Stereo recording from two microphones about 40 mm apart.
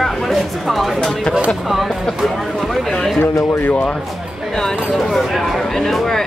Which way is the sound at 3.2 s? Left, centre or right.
Left.